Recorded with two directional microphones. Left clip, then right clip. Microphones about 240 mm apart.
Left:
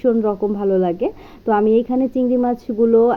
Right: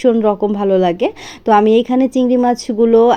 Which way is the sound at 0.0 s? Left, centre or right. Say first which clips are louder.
Right 5 dB; right.